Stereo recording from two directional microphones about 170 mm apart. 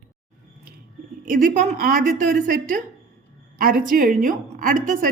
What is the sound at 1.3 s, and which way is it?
A woman's voice, 55° right (ahead or behind).